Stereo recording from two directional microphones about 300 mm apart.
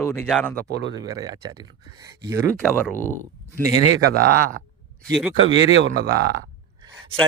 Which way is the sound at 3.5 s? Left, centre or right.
Centre.